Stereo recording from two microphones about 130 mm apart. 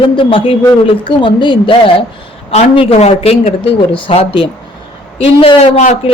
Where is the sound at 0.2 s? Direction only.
40° left (ahead or behind).